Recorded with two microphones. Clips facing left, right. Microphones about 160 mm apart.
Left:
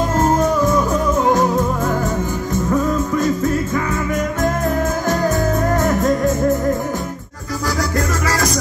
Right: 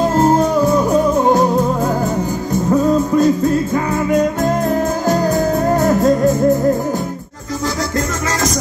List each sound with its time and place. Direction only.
0.1 s music: 35° right (ahead or behind)
2.7 s music: 35° right (ahead or behind)
5.7 s music: 35° right (ahead or behind)